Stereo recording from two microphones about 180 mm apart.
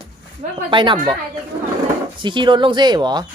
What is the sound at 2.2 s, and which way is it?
Speech, 25° right (ahead or behind).